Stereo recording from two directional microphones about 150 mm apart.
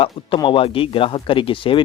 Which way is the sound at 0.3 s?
35° left (ahead or behind).